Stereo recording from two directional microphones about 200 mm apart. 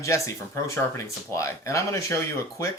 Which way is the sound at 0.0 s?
15° left (ahead or behind).